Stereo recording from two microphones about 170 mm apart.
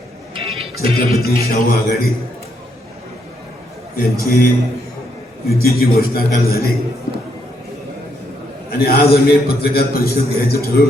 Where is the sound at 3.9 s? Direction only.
60° left (ahead or behind).